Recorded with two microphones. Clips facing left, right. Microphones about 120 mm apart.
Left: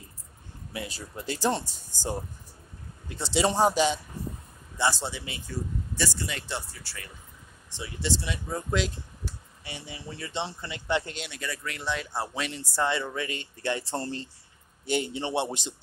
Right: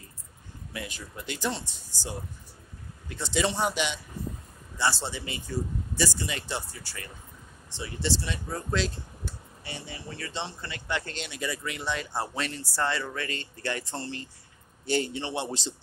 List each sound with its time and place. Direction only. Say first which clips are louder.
0.7 s speech: left 2 dB; 30° left (ahead or behind)
3.1 s speech: left 2 dB; 30° left (ahead or behind)
4.7 s a man's voice: left 1 dB; 15° left (ahead or behind)
5.0 s speech: even; 5° left (ahead or behind)
7.7 s speech: right 1 dB; 10° left (ahead or behind)
11.3 s speech: right 5 dB; 10° right (ahead or behind); by 15.7 s 25° left (ahead or behind)